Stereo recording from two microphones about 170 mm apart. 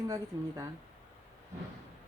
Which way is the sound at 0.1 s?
20° right (ahead or behind).